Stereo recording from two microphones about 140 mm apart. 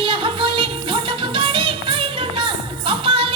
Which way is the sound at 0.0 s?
40° right (ahead or behind).